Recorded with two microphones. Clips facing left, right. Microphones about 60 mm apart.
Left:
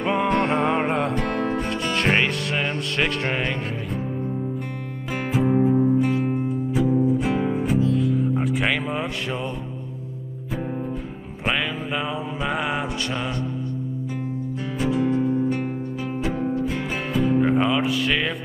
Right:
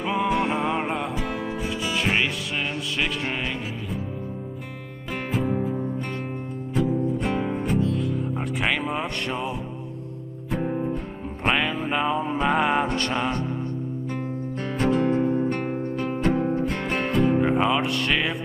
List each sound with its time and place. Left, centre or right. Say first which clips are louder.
0.0 s music: left 2 dB; centre
0.3 s music: left 3 dB; left
5.1 s music: left 4 dB; centre
5.5 s music: left 7 dB; centre
5.9 s music: left 10 dB; centre
10.5 s music: right 2 dB; centre
12.4 s music: right 4 dB; centre
15.0 s music: left 1 dB; right
16.6 s music: right 1 dB; centre